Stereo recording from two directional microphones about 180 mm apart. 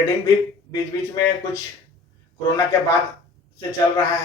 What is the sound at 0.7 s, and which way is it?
A man's voice, 20° left (ahead or behind).